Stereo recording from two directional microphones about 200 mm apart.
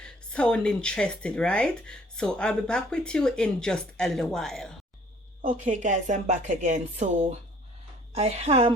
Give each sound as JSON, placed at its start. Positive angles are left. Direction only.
{"t": 0.0, "sound": "speech", "side_deg": 5}
{"t": 5.4, "sound": "a woman's voice", "side_deg": -40}